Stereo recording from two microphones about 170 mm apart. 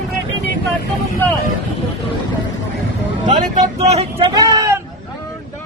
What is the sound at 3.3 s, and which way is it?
Vehicle, 45° right (ahead or behind).